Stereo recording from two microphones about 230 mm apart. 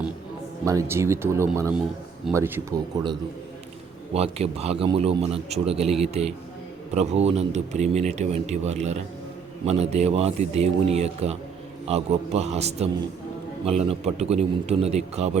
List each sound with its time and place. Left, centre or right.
0.6 s a man's voice: centre